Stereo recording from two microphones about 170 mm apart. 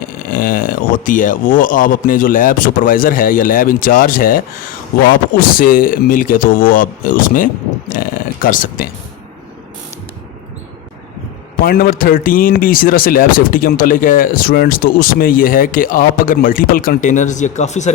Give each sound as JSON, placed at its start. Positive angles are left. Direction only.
{"t": 0.3, "sound": "speech", "side_deg": 55}
{"t": 11.6, "sound": "speech", "side_deg": 60}